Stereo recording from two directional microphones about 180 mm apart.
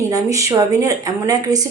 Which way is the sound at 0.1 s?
20° right (ahead or behind).